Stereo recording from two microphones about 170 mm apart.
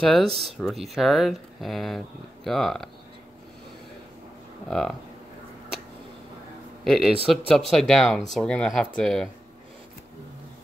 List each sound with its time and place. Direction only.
0.0 s speech: 5° left (ahead or behind)
0.3 s speech: 35° right (ahead or behind)
0.6 s speech: centre (ahead or behind)
4.6 s speech: 5° left (ahead or behind)
6.8 s speech: centre (ahead or behind)